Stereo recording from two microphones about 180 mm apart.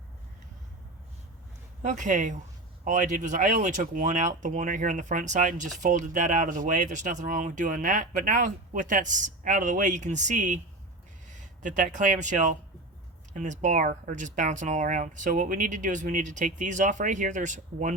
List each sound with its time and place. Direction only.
1.8 s speech: 45° right (ahead or behind)